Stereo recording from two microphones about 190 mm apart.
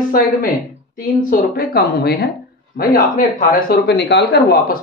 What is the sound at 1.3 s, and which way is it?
Speech, 50° left (ahead or behind).